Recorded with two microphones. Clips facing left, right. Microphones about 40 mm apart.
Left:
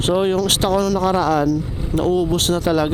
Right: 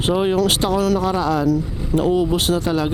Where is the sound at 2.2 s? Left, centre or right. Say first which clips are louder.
Even; centre.